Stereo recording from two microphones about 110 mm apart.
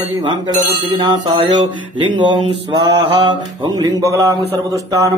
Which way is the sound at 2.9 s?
45° right (ahead or behind).